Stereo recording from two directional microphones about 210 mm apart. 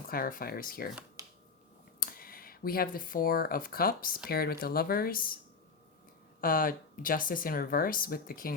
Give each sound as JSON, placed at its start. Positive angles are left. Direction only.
{"t": 0.1, "sound": "speech", "side_deg": 45}
{"t": 2.0, "sound": "speech", "side_deg": 45}
{"t": 6.4, "sound": "speech", "side_deg": 40}